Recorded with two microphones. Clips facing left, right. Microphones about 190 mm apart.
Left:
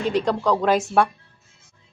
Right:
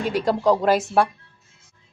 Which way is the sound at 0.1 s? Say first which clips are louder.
Right 2 dB; 5° right (ahead or behind).